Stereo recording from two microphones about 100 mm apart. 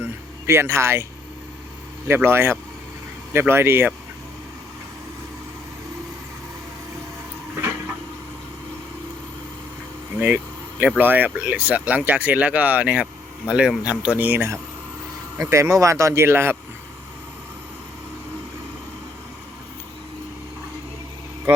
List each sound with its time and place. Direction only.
0.0 s a sound: 25° right (ahead or behind)
2.0 s speech: 25° right (ahead or behind)
10.2 s speech: 15° right (ahead or behind)